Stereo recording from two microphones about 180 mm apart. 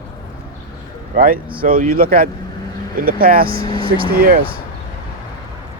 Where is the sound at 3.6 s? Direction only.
30° right (ahead or behind).